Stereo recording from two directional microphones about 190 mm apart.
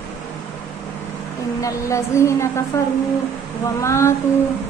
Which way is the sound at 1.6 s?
15° left (ahead or behind).